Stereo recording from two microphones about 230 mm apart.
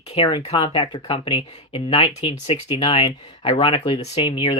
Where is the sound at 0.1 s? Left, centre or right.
Left.